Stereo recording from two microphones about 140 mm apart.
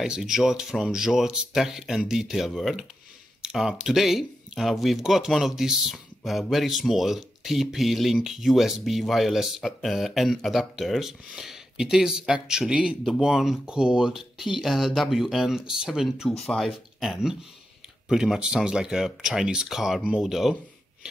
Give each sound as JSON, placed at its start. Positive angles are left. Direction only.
{"t": 0.0, "sound": "speech", "side_deg": -5}